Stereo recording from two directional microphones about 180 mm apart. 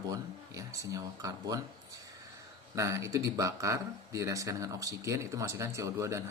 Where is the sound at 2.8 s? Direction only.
15° right (ahead or behind).